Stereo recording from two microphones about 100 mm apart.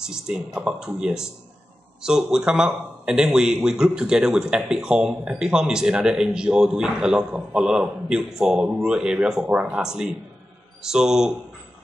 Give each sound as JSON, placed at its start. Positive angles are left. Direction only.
{"t": 0.0, "sound": "a man's voice", "side_deg": -5}